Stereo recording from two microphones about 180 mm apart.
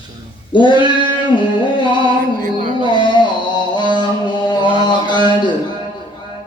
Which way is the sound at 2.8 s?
25° left (ahead or behind).